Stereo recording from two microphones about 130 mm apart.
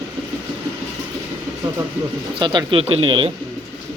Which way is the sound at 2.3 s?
35° right (ahead or behind).